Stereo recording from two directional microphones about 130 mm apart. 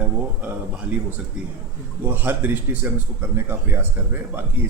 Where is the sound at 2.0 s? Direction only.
15° right (ahead or behind).